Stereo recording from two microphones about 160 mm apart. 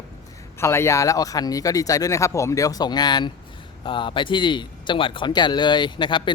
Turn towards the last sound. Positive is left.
turn(degrees=30)  # may be behind; listen again after turning